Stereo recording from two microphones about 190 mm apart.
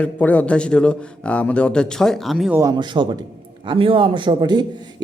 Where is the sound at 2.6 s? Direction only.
20° right (ahead or behind).